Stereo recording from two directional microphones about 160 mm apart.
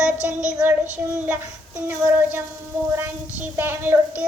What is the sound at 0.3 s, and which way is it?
Child singing, 10° right (ahead or behind).